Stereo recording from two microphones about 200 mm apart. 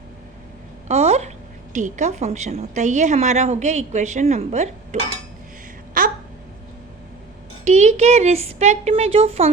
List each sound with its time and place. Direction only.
0.9 s a sound: 35° right (ahead or behind)
1.7 s a woman's voice: 40° right (ahead or behind)
6.0 s babbling: 45° right (ahead or behind)
7.6 s a woman's voice: 35° right (ahead or behind)